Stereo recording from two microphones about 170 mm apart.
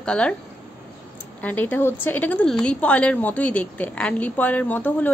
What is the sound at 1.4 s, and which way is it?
A woman's voice, 10° left (ahead or behind).